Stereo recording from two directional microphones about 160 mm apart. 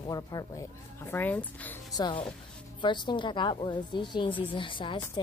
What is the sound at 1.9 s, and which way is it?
A woman's voice, 30° left (ahead or behind).